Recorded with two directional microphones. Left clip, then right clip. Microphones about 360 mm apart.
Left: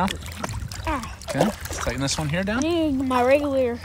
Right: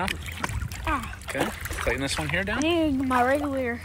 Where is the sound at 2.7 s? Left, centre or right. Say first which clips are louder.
Left 1 dB; centre.